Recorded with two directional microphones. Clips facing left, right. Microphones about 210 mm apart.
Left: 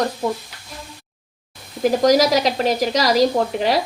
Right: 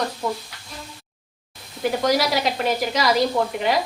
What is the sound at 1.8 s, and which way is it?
Sizzle, 40° left (ahead or behind).